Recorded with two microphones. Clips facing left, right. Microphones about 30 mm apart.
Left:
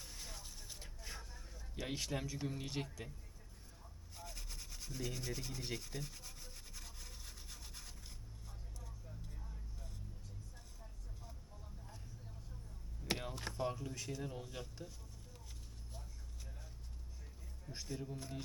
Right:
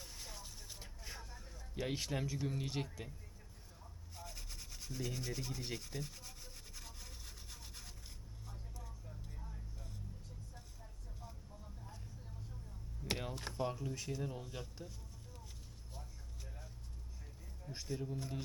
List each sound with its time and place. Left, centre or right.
0.0 s vehicle: centre
2.5 s speech: centre
4.1 s rub: centre
8.4 s vehicle: centre
13.1 s a sound: centre
15.9 s vehicle: centre
17.7 s speech: centre